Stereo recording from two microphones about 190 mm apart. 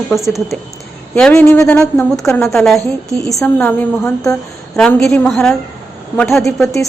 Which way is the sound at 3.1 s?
15° left (ahead or behind).